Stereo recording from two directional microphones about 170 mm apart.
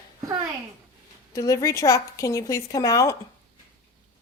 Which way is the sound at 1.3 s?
20° left (ahead or behind).